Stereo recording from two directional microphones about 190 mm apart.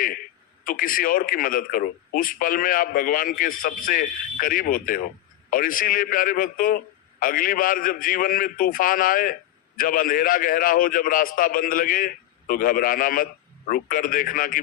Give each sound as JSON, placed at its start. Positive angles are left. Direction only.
{"t": 0.6, "sound": "a man's voice", "side_deg": 45}